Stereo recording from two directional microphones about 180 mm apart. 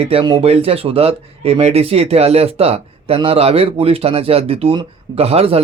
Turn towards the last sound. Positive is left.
turn(degrees=-35)  # may be behind; listen again after turning